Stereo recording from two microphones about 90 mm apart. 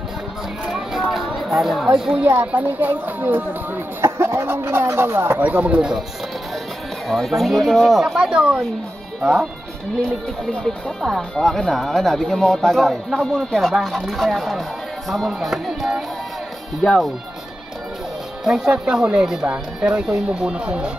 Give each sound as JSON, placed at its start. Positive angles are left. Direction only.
{"t": 0.7, "sound": "a sound", "side_deg": -5}
{"t": 2.0, "sound": "speech", "side_deg": -10}
{"t": 7.1, "sound": "speech", "side_deg": 0}
{"t": 18.4, "sound": "speech", "side_deg": 0}